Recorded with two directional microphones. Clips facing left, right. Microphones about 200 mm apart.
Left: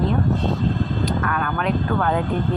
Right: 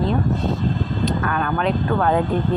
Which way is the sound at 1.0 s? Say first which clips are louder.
Right 1 dB; 25° right (ahead or behind).